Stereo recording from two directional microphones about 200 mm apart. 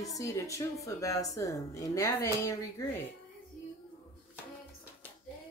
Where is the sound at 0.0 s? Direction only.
15° left (ahead or behind).